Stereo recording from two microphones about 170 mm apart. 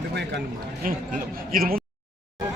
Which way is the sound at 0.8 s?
55° right (ahead or behind).